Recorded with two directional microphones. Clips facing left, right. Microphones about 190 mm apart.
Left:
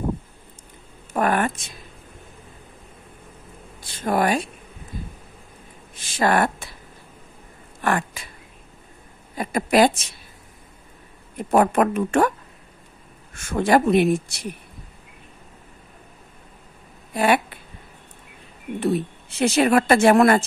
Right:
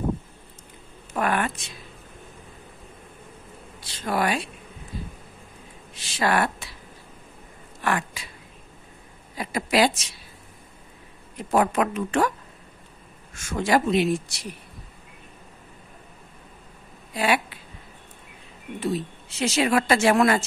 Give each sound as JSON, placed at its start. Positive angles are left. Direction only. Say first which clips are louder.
{"t": 1.1, "sound": "a woman's voice", "louder": "left 4 dB", "side_deg": 45}
{"t": 3.8, "sound": "a woman's voice", "louder": "left 4 dB", "side_deg": 50}
{"t": 5.9, "sound": "speech", "louder": "left 3 dB", "side_deg": 50}
{"t": 7.8, "sound": "speech", "louder": "left 3 dB", "side_deg": 50}
{"t": 9.4, "sound": "a woman's voice", "louder": "left 4 dB", "side_deg": 50}
{"t": 11.3, "sound": "a woman's voice", "louder": "left 4 dB", "side_deg": 50}
{"t": 13.3, "sound": "a woman's voice", "louder": "left 4 dB", "side_deg": 55}
{"t": 17.1, "sound": "speech", "louder": "left 4 dB", "side_deg": 55}
{"t": 18.8, "sound": "a woman's voice", "louder": "left 5 dB", "side_deg": 60}